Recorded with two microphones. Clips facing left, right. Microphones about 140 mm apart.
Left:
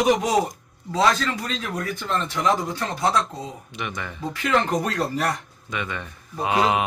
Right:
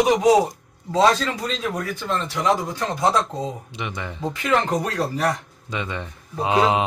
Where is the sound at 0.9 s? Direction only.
25° right (ahead or behind).